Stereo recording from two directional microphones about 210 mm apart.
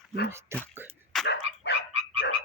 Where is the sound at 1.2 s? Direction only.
55° left (ahead or behind).